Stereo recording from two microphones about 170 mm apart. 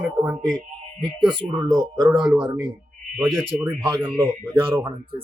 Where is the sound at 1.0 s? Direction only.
30° right (ahead or behind).